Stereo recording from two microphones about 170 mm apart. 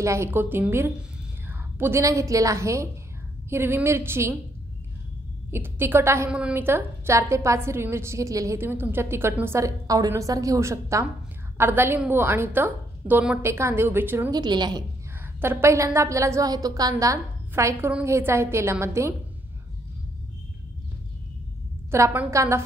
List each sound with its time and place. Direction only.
0.0 s a woman's voice: 15° right (ahead or behind)
5.5 s a woman's voice: 15° right (ahead or behind)
14.3 s a woman's voice: 25° right (ahead or behind)
15.4 s a woman's voice: 15° right (ahead or behind)
21.9 s a woman's voice: 15° right (ahead or behind)